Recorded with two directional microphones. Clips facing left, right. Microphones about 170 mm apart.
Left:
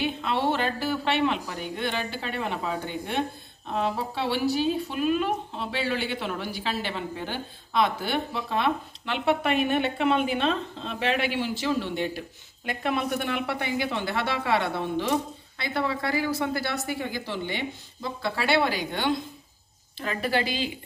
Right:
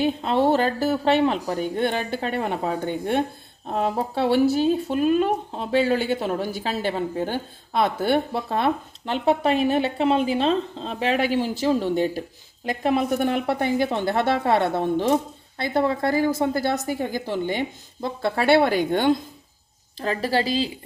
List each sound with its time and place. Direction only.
0.0 s speech: 45° right (ahead or behind)
20.0 s a woman's voice: 35° right (ahead or behind)